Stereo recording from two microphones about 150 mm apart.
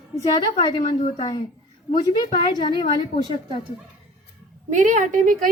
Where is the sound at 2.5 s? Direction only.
30° left (ahead or behind).